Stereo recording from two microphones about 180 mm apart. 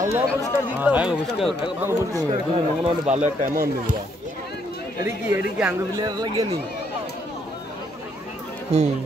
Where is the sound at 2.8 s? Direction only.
40° right (ahead or behind).